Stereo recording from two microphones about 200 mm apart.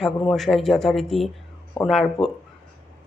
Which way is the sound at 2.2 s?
Centre (ahead or behind).